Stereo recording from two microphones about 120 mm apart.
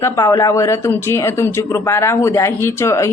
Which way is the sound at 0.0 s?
25° left (ahead or behind).